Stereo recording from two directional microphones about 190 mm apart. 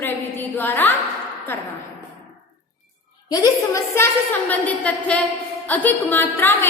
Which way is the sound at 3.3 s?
20° left (ahead or behind).